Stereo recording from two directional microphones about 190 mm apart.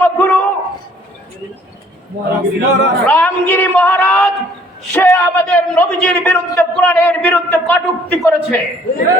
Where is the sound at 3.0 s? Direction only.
10° left (ahead or behind).